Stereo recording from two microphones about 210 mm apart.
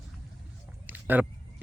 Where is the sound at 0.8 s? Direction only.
10° right (ahead or behind).